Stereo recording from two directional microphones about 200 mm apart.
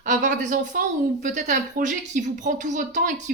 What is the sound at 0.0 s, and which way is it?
Speech, 40° right (ahead or behind).